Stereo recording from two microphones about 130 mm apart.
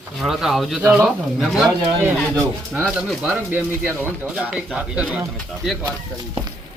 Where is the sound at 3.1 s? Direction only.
10° right (ahead or behind).